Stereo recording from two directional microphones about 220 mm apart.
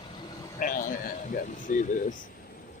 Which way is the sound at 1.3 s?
35° left (ahead or behind).